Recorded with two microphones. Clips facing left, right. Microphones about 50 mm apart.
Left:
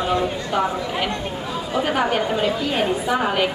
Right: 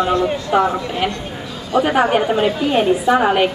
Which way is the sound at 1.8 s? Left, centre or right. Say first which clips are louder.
Right 6 dB; centre.